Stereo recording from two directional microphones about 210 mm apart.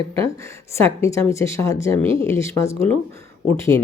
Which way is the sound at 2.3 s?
15° left (ahead or behind).